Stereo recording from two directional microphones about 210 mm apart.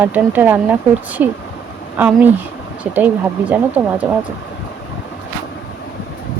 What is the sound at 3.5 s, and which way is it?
Speech, 5° right (ahead or behind).